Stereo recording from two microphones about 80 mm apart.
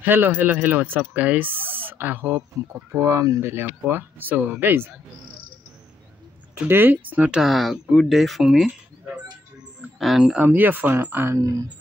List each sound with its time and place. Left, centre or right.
0.0 s speech: right
3.6 s speech: right
6.7 s speech: right
7.4 s speech: centre
9.9 s speech: centre
10.4 s speech: right